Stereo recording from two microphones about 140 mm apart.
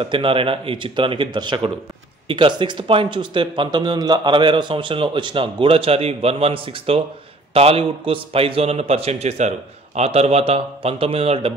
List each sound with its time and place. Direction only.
0.0 s a man's voice: 40° right (ahead or behind)